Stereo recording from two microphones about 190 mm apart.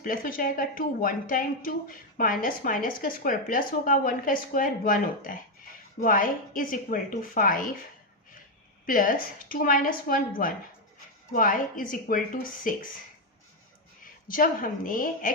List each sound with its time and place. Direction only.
0.0 s a woman's voice: 45° left (ahead or behind)
8.9 s a woman's voice: 45° left (ahead or behind)
14.0 s a woman's voice: 45° left (ahead or behind)